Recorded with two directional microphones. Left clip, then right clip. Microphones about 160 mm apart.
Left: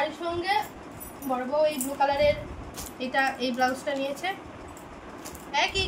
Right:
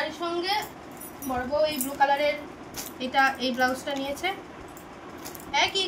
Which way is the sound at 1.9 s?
15° left (ahead or behind).